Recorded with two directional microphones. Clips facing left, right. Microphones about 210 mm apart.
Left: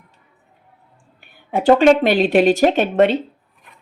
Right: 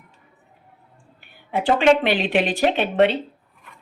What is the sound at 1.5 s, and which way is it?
Speech, 45° left (ahead or behind).